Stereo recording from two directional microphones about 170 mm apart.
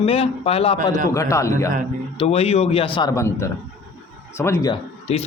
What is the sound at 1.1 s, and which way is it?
Speech, 15° left (ahead or behind).